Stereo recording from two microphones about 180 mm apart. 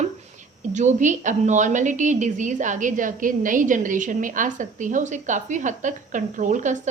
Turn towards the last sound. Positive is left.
turn(degrees=-45)  # may be behind; listen again after turning